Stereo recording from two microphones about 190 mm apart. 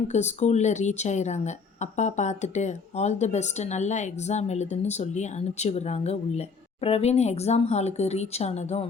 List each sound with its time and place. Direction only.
0.1 s speech: 35° left (ahead or behind)